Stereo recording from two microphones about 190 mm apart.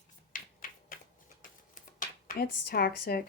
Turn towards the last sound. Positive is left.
turn(degrees=55)  # may be behind; listen again after turning